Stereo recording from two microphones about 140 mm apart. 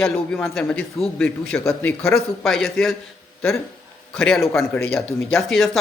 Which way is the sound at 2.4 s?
Centre (ahead or behind).